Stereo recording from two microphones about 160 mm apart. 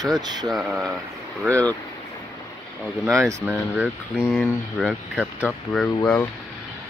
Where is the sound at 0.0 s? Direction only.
25° right (ahead or behind).